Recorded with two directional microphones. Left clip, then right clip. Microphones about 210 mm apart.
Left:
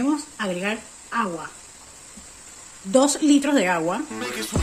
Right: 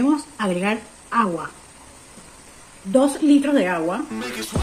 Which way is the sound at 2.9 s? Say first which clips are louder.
Right 1 dB; 25° left (ahead or behind).